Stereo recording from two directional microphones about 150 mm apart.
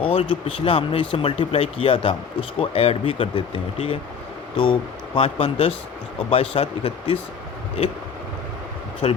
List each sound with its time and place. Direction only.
0.1 s speech: 35° left (ahead or behind)
9.0 s speech: 40° left (ahead or behind)